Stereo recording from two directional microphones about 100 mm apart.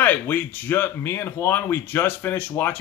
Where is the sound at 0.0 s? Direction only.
20° left (ahead or behind).